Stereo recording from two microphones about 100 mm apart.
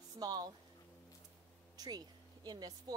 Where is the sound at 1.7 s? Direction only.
40° right (ahead or behind).